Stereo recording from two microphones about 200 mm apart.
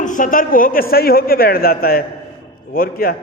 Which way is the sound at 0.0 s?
40° left (ahead or behind).